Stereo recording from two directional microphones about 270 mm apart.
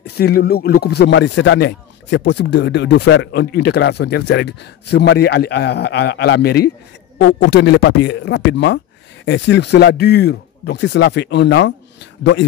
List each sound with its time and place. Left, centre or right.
0.0 s speech: left